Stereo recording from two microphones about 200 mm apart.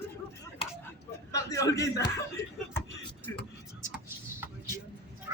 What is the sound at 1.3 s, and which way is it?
Speech, 15° left (ahead or behind).